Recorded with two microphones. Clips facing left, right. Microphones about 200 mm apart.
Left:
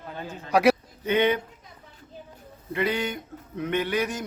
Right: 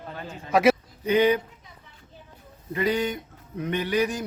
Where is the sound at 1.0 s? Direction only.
35° right (ahead or behind).